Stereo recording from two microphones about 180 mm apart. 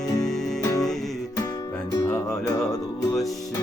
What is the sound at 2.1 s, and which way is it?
Music, 20° left (ahead or behind).